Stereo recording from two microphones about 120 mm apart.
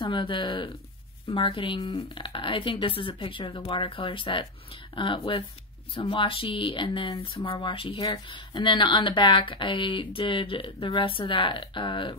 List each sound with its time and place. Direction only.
0.0 s speech: 45° left (ahead or behind)